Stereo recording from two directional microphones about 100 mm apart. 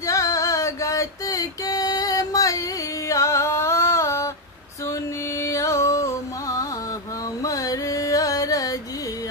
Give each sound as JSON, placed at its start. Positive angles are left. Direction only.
{"t": 0.0, "sound": "a sound", "side_deg": 30}
{"t": 3.1, "sound": "music", "side_deg": 30}
{"t": 5.4, "sound": "music", "side_deg": 30}
{"t": 7.4, "sound": "carnatic music", "side_deg": 35}